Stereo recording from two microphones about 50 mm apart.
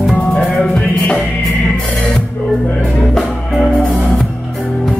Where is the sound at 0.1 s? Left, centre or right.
Left.